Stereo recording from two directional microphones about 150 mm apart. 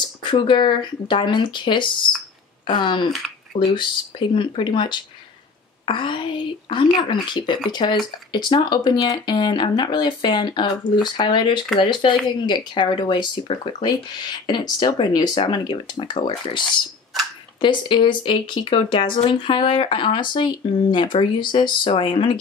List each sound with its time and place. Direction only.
0.2 s speech: 30° left (ahead or behind)